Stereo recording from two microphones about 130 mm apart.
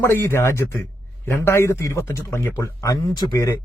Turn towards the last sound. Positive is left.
turn(degrees=25)  # may be behind; listen again after turning